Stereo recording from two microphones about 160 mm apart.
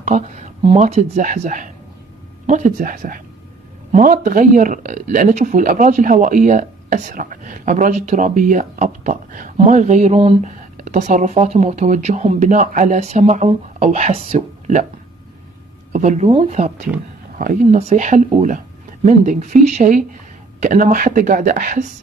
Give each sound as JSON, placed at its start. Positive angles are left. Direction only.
{"t": 0.0, "sound": "speech", "side_deg": -45}
{"t": 10.8, "sound": "speech", "side_deg": -50}
{"t": 15.9, "sound": "speech", "side_deg": -50}
{"t": 17.4, "sound": "speech", "side_deg": -55}